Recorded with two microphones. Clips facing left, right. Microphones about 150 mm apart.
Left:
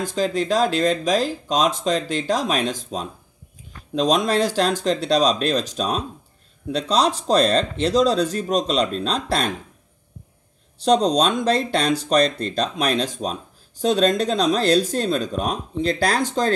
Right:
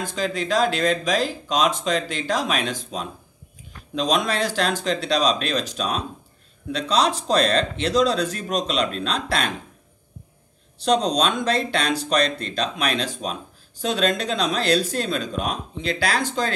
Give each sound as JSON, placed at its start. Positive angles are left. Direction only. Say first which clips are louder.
{"t": 0.0, "sound": "speech", "louder": "left 4 dB", "side_deg": 40}
{"t": 10.8, "sound": "speech", "louder": "left 3 dB", "side_deg": 35}